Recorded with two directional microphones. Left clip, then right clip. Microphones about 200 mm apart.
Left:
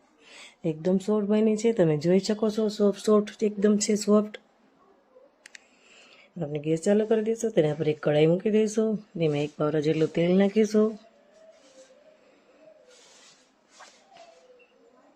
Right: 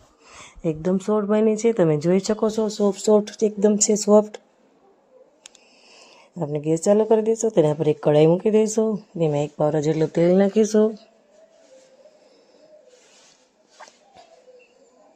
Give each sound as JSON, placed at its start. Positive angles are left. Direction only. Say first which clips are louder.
{"t": 0.3, "sound": "a woman's voice", "louder": "right 5 dB", "side_deg": -10}
{"t": 5.9, "sound": "a woman's voice", "louder": "right 4 dB", "side_deg": -15}
{"t": 10.2, "sound": "speech", "louder": "right 10 dB", "side_deg": 0}
{"t": 10.5, "sound": "speech", "louder": "right 5 dB", "side_deg": -20}